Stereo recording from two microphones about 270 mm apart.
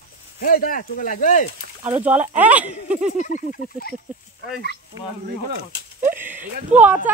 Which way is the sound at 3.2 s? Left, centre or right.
Left.